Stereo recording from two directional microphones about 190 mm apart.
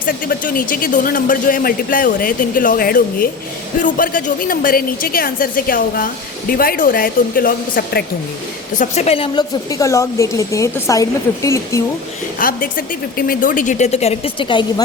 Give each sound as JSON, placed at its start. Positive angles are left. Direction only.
{"t": 0.0, "sound": "speech", "side_deg": 50}
{"t": 8.7, "sound": "a woman's voice", "side_deg": 40}
{"t": 12.4, "sound": "speech", "side_deg": 45}